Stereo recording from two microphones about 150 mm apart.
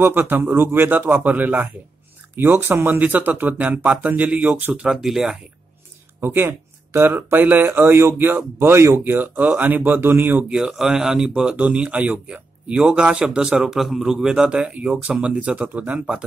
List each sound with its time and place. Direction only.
0.0 s speech: 15° right (ahead or behind)
6.2 s speech: 15° right (ahead or behind)